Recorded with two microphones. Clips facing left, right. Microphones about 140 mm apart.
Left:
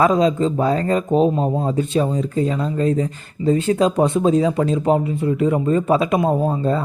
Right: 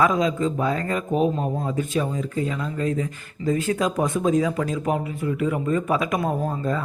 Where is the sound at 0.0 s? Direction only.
30° left (ahead or behind).